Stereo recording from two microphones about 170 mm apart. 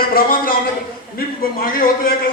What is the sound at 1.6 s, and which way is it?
Speech, 55° left (ahead or behind).